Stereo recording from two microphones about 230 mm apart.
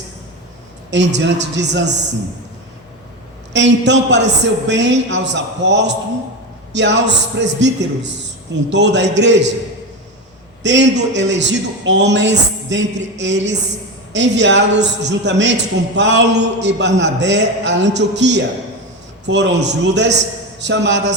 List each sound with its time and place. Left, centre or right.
1.2 s a man's voice: right
3.5 s a man's voice: right
10.6 s a man's voice: right